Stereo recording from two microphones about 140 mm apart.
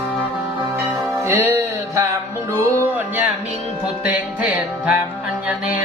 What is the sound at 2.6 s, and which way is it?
Music, 15° right (ahead or behind).